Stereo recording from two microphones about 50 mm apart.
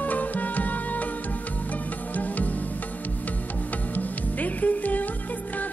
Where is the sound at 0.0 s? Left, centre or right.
Left.